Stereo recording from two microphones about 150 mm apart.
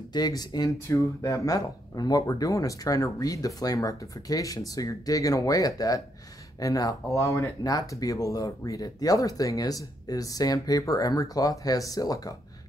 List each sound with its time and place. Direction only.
0.1 s speech: 25° left (ahead or behind)